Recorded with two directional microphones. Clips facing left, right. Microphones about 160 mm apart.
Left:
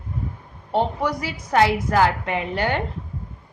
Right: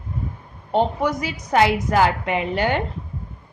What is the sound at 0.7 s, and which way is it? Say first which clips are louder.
A woman's voice: right 2 dB; 20° right (ahead or behind).